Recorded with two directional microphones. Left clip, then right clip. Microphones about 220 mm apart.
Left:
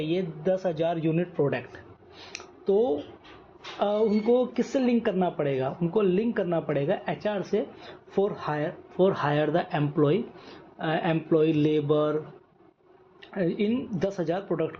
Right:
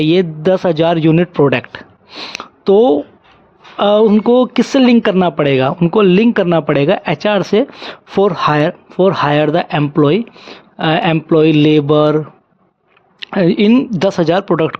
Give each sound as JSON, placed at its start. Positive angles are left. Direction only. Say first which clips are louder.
{"t": 0.0, "sound": "speech", "louder": "right 15 dB", "side_deg": -55}